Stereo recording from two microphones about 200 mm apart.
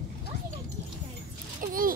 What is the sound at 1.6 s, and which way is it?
Speech, 45° right (ahead or behind).